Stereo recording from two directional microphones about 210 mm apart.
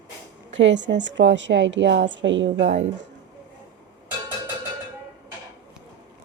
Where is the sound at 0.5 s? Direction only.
60° right (ahead or behind).